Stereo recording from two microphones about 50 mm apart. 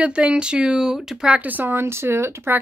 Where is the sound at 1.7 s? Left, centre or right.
Right.